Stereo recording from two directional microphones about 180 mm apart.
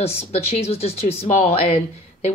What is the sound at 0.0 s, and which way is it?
Speech, 35° left (ahead or behind).